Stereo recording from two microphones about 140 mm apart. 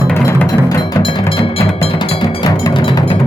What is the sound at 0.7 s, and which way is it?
Music, 25° left (ahead or behind).